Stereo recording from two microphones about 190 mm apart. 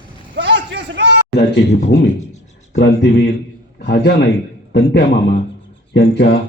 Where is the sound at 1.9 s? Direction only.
60° left (ahead or behind).